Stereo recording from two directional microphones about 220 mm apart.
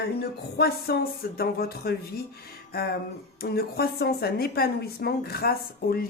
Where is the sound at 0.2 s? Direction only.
45° left (ahead or behind).